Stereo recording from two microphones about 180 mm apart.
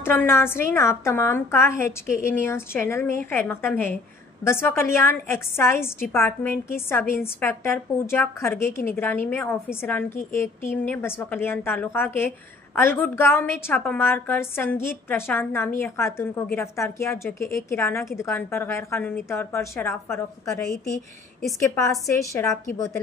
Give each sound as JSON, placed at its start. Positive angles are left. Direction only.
{"t": 0.0, "sound": "a woman's voice", "side_deg": 10}
{"t": 22.0, "sound": "a woman's voice", "side_deg": 15}